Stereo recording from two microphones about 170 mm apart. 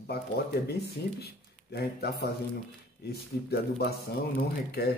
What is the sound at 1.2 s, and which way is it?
A man's voice, 70° left (ahead or behind).